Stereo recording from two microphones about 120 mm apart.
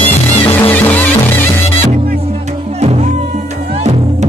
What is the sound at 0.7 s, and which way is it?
Music, 15° left (ahead or behind).